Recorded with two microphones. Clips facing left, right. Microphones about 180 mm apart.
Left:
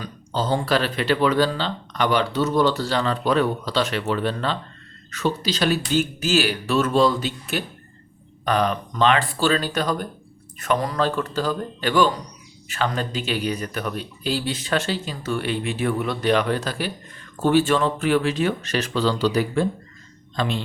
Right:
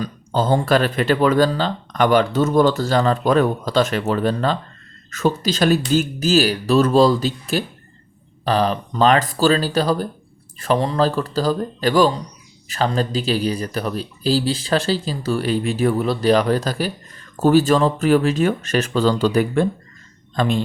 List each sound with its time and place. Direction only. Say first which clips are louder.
0.0 s a woman's voice: right 5 dB; 50° right (ahead or behind)